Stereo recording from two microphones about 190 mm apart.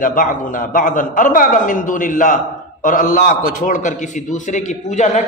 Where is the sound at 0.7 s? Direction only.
45° left (ahead or behind).